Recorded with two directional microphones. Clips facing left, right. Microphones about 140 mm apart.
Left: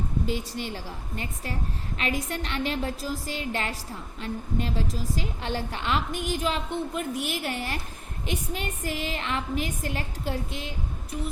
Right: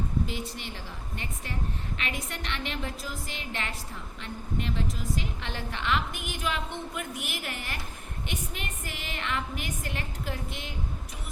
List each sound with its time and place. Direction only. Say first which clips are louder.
1.1 s a woman's voice: left 4 dB; 40° left (ahead or behind)